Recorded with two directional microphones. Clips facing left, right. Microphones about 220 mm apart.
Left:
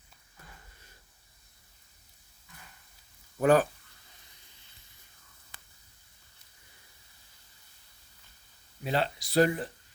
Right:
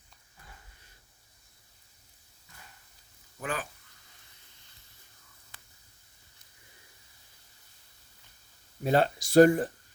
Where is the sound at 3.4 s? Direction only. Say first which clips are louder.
Left 13 dB; 40° left (ahead or behind).